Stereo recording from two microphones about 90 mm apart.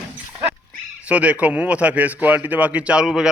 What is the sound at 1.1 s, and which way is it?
Speech, 15° right (ahead or behind).